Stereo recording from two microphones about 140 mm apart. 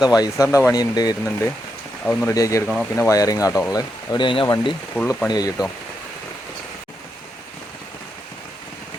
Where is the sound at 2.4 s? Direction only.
20° left (ahead or behind).